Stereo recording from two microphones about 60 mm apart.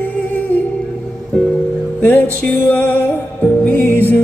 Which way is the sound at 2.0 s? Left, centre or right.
Left.